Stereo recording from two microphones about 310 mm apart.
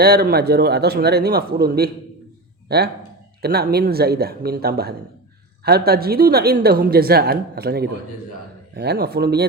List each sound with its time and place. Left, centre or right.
0.0 s a woman's voice: right